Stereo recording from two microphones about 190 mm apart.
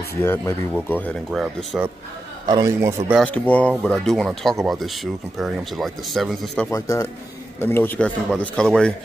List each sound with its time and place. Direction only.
0.2 s speech: 10° left (ahead or behind)
2.4 s a man's voice: 20° right (ahead or behind)
3.2 s speech: 5° left (ahead or behind)
6.7 s speech: 15° left (ahead or behind)